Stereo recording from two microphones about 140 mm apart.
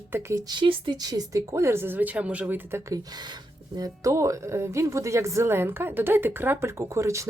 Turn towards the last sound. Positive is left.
turn(degrees=-20)  # may be behind; listen again after turning